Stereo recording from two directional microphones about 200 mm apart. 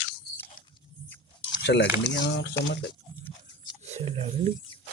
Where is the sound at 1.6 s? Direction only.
60° left (ahead or behind).